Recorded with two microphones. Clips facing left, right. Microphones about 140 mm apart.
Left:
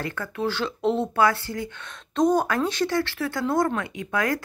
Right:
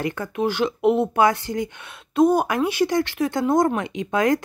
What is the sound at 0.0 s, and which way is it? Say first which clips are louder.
Speech: right 4 dB; 15° right (ahead or behind).